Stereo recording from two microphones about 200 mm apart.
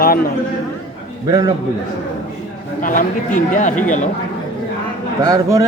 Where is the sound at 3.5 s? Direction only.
40° left (ahead or behind).